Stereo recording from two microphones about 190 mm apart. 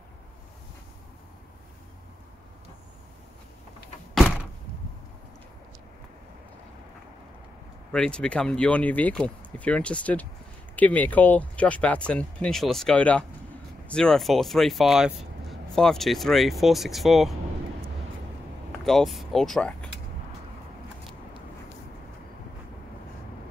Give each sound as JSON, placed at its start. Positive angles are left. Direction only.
{"t": 7.9, "sound": "speech", "side_deg": 5}
{"t": 18.9, "sound": "speech", "side_deg": 0}